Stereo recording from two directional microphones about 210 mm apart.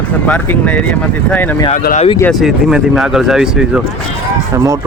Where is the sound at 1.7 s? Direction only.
40° left (ahead or behind).